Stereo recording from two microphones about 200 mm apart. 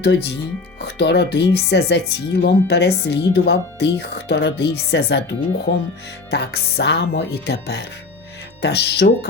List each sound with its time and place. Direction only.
0.0 s speech: 55° left (ahead or behind)